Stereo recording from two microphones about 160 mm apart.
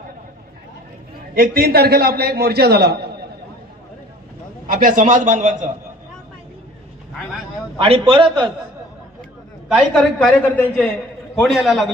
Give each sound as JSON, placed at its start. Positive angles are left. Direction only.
{"t": 1.3, "sound": "a man's voice", "side_deg": -70}
{"t": 4.6, "sound": "a man's voice", "side_deg": -60}
{"t": 7.8, "sound": "a man's voice", "side_deg": -35}
{"t": 9.6, "sound": "a man's voice", "side_deg": 5}